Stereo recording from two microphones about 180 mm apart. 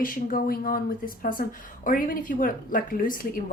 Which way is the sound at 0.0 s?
50° left (ahead or behind).